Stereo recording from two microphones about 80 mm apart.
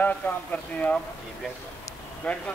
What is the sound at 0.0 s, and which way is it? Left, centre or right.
Speech, centre.